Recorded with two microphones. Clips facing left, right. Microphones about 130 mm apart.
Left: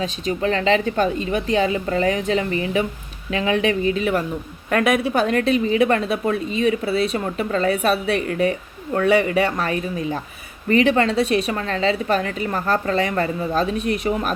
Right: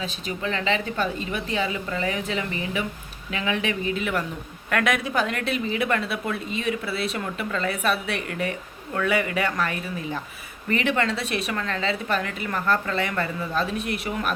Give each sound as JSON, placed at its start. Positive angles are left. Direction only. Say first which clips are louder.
{"t": 0.0, "sound": "a woman's voice", "louder": "left 7 dB", "side_deg": 40}
{"t": 11.1, "sound": "a woman's voice", "louder": "left 8 dB", "side_deg": 35}